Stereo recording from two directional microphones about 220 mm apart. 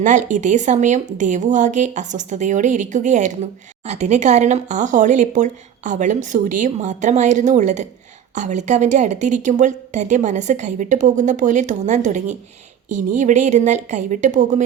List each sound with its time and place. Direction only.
0.0 s a woman's voice: 35° right (ahead or behind)